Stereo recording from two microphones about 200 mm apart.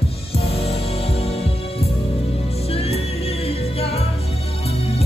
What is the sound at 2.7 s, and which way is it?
Music, 30° left (ahead or behind).